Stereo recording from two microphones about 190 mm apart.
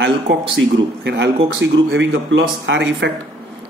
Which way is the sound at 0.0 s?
65° right (ahead or behind).